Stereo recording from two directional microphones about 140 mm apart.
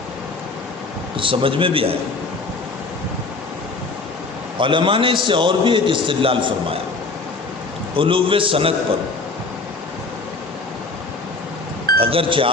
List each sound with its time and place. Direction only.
1.1 s a man's voice: 40° right (ahead or behind)
4.5 s a man's voice: 35° right (ahead or behind)
7.9 s a man's voice: 40° right (ahead or behind)
11.9 s a man's voice: 40° right (ahead or behind)